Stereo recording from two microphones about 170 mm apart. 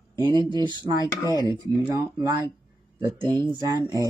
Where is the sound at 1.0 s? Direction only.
25° left (ahead or behind).